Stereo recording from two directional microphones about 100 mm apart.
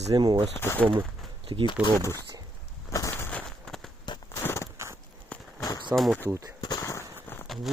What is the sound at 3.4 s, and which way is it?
Fireworks, 5° left (ahead or behind).